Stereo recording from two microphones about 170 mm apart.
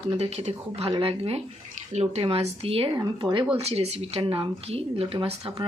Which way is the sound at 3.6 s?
40° right (ahead or behind).